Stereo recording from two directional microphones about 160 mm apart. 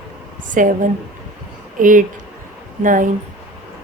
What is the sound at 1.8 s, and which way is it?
A woman's voice, 55° right (ahead or behind).